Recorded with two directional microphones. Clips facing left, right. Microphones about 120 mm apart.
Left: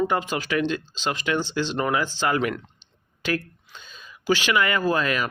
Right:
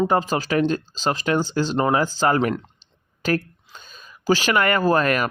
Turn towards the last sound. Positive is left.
turn(degrees=-50)  # may be behind; listen again after turning